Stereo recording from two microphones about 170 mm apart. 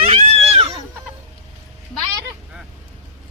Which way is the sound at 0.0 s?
40° right (ahead or behind).